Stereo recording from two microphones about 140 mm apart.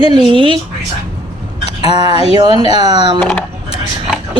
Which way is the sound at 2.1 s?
45° left (ahead or behind).